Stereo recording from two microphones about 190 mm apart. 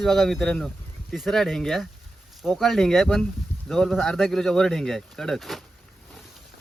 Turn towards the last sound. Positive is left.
turn(degrees=0)  # may be behind; listen again after turning